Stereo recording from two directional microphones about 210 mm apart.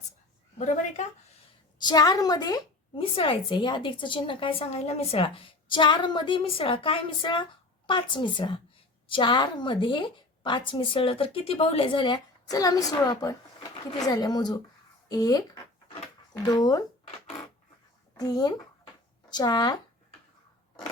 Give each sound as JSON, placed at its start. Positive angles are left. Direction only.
{"t": 0.6, "sound": "a woman's voice", "side_deg": 35}
{"t": 1.8, "sound": "a woman's voice", "side_deg": 20}
{"t": 18.2, "sound": "a woman's voice", "side_deg": 20}